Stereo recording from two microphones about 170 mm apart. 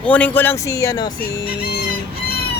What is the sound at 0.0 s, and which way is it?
Speech, 10° left (ahead or behind).